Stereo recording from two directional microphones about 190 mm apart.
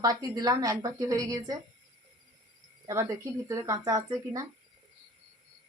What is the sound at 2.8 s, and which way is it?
Speech, 15° right (ahead or behind).